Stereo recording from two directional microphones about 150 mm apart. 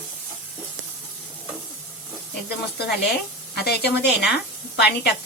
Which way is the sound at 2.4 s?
90° left.